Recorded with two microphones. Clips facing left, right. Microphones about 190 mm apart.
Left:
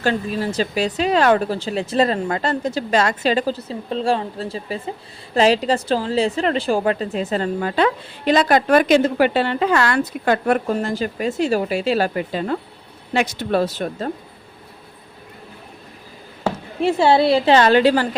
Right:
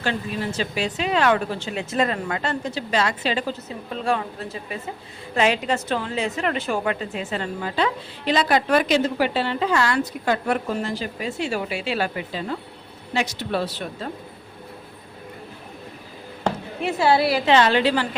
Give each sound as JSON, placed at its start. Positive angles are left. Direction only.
{"t": 0.0, "sound": "speech", "side_deg": 40}
{"t": 7.6, "sound": "a woman's voice", "side_deg": 50}
{"t": 16.8, "sound": "a woman's voice", "side_deg": 25}
{"t": 17.5, "sound": "a woman's voice", "side_deg": 45}